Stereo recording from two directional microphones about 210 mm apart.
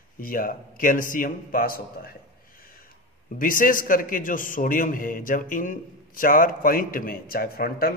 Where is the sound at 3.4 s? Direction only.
40° left (ahead or behind).